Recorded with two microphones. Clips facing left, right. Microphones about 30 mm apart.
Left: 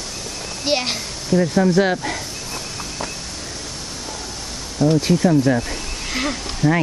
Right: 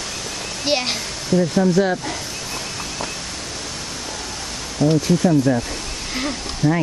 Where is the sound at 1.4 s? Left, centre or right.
Left.